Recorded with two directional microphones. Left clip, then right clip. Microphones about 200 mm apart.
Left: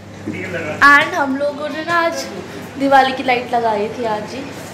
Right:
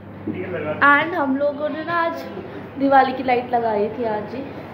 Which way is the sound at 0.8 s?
10° right (ahead or behind).